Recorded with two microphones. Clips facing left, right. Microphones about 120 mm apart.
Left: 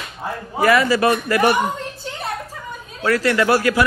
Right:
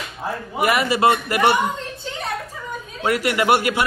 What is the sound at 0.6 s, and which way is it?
Speech, 25° right (ahead or behind).